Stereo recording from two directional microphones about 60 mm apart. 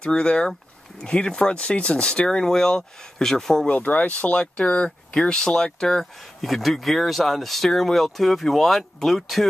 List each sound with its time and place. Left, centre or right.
0.0 s speech: centre
3.6 s speech: left; by 9.5 s centre